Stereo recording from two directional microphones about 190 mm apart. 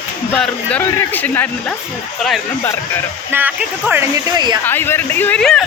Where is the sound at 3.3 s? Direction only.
10° right (ahead or behind).